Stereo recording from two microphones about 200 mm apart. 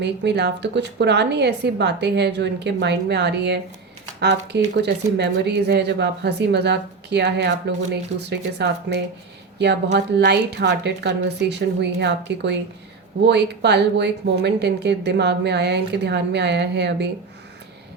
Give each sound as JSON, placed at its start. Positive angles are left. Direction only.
{"t": 0.0, "sound": "speech", "side_deg": -55}